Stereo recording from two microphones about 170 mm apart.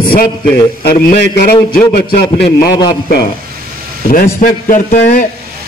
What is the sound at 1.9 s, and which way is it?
Speech, 65° left (ahead or behind).